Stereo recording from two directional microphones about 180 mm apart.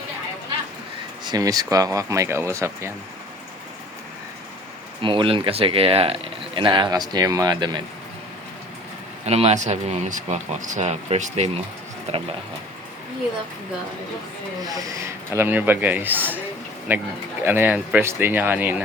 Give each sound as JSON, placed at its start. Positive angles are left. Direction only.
{"t": 1.2, "sound": "speech", "side_deg": -20}
{"t": 5.0, "sound": "speech", "side_deg": -30}
{"t": 9.2, "sound": "speech", "side_deg": -35}
{"t": 14.8, "sound": "speech", "side_deg": -15}